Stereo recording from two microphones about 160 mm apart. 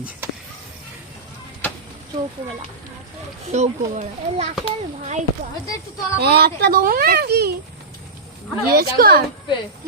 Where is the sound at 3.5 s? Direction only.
45° right (ahead or behind).